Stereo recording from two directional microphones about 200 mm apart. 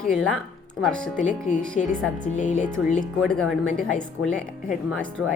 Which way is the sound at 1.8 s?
35° left (ahead or behind).